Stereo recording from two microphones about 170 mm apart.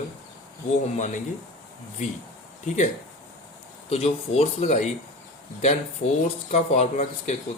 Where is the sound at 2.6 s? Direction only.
45° left (ahead or behind).